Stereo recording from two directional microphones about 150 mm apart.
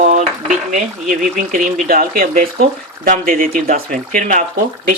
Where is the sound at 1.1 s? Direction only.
60° right (ahead or behind).